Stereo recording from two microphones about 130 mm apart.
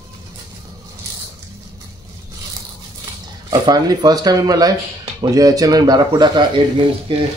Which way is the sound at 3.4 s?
30° right (ahead or behind).